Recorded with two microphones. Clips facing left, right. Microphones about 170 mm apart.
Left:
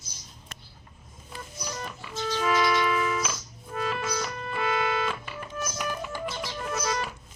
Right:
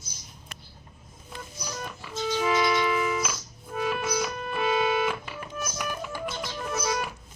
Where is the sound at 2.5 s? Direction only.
20° right (ahead or behind).